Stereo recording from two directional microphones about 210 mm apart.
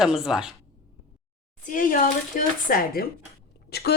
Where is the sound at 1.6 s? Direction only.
40° left (ahead or behind).